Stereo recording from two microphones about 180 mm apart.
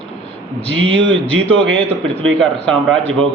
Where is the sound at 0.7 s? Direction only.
80° right.